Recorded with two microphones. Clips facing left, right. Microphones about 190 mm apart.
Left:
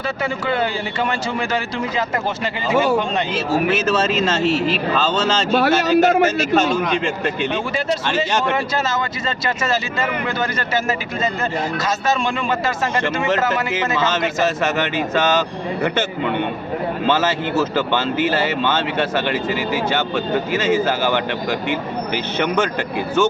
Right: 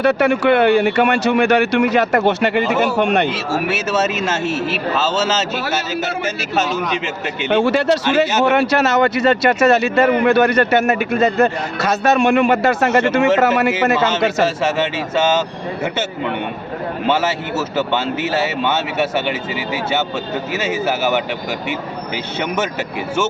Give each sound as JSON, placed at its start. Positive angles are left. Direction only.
{"t": 0.0, "sound": "speech", "side_deg": -70}
{"t": 3.7, "sound": "speech", "side_deg": -10}
{"t": 5.5, "sound": "speech", "side_deg": 60}
{"t": 6.5, "sound": "a man's voice", "side_deg": -5}
{"t": 7.4, "sound": "a man's voice", "side_deg": -70}
{"t": 15.2, "sound": "speech", "side_deg": -10}
{"t": 17.1, "sound": "speech", "side_deg": -10}
{"t": 20.6, "sound": "speech", "side_deg": -10}